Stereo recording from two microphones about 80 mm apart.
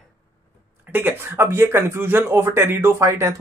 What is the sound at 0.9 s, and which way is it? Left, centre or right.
Speech, right.